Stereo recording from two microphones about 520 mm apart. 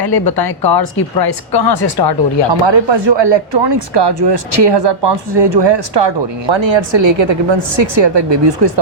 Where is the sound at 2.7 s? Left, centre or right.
Right.